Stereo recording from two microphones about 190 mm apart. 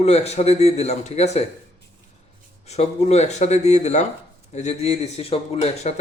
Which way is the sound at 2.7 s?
35° left (ahead or behind).